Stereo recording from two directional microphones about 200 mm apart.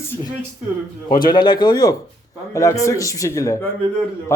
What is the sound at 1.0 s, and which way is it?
A man's voice, 20° left (ahead or behind).